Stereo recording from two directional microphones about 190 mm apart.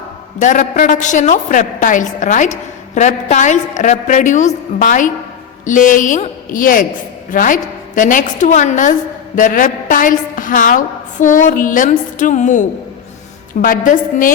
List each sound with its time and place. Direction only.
0.3 s a woman's voice: 40° left (ahead or behind)